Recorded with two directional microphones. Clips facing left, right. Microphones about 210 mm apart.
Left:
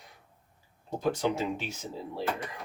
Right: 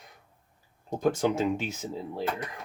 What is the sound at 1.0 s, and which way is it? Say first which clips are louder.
Speech: right 3 dB; 45° right (ahead or behind).